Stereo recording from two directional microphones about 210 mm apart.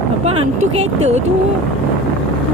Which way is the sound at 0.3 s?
30° right (ahead or behind).